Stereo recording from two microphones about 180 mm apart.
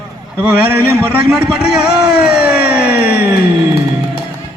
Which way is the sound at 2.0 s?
5° right (ahead or behind).